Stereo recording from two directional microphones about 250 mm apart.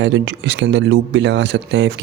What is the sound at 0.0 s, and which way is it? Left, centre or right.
Speech, right.